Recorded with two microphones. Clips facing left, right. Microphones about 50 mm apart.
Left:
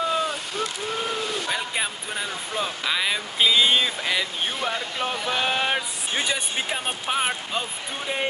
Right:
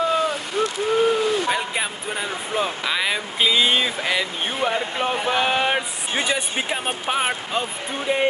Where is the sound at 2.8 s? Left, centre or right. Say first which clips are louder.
Right 2 dB; centre.